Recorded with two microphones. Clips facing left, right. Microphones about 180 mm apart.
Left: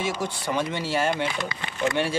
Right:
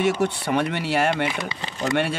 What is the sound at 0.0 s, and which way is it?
Speech, 65° right (ahead or behind).